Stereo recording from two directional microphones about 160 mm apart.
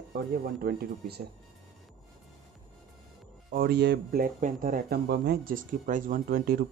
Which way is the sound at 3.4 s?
70° right (ahead or behind).